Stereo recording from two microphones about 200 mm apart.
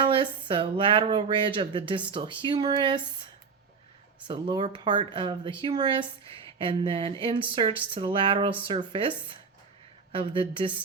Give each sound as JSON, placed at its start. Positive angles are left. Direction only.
{"t": 0.0, "sound": "speech", "side_deg": -25}
{"t": 4.3, "sound": "speech", "side_deg": -25}